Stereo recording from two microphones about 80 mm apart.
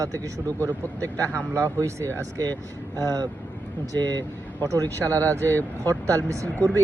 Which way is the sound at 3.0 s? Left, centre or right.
Right.